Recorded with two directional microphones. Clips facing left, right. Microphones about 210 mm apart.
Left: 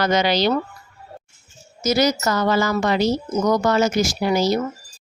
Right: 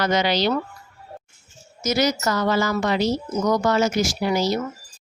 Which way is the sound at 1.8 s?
35° left (ahead or behind).